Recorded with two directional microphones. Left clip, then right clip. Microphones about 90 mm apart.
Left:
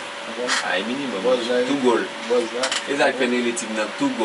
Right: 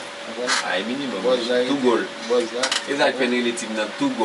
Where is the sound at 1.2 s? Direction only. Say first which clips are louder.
Even; 10° right (ahead or behind).